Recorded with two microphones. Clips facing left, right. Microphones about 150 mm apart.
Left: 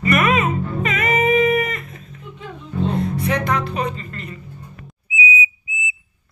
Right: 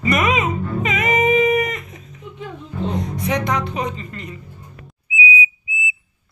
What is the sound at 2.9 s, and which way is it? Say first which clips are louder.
Speech: even; 15° right (ahead or behind).